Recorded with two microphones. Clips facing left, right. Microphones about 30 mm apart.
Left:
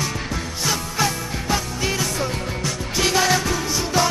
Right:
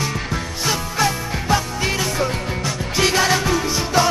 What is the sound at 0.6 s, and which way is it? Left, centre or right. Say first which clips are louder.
Music: right 2 dB; centre.